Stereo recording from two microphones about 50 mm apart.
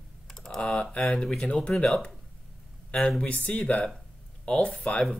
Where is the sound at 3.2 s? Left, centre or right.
Left.